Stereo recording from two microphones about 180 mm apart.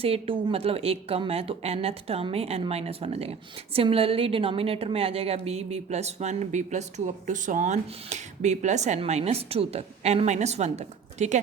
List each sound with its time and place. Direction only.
0.0 s a woman's voice: 30° right (ahead or behind)